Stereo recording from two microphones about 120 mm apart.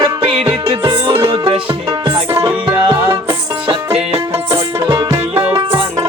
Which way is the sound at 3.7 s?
55° right (ahead or behind).